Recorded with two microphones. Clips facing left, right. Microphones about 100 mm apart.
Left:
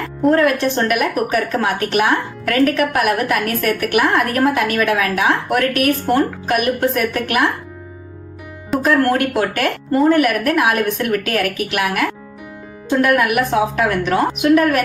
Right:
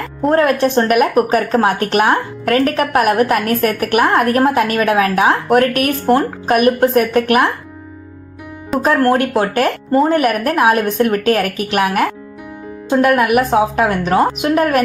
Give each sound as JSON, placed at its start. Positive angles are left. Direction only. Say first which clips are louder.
{"t": 0.3, "sound": "speech", "louder": "right 3 dB", "side_deg": -35}
{"t": 8.8, "sound": "speech", "louder": "right 2 dB", "side_deg": -35}
{"t": 12.9, "sound": "speech", "louder": "right 3 dB", "side_deg": -30}